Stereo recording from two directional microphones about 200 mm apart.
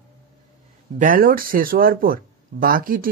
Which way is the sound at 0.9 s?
45° right (ahead or behind).